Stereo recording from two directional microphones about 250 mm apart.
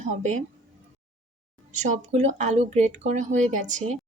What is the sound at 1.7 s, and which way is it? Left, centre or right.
Speech, right.